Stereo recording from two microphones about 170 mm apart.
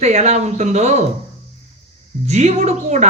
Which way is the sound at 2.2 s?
40° right (ahead or behind).